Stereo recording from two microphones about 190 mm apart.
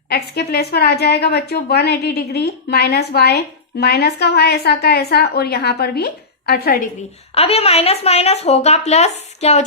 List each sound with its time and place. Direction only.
0.1 s a woman's voice: 60° left (ahead or behind)
7.3 s speech: 30° left (ahead or behind)